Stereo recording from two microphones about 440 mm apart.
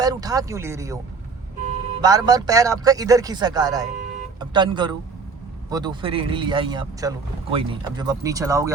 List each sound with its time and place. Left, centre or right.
0.0 s a man's voice: centre
2.0 s a man's voice: centre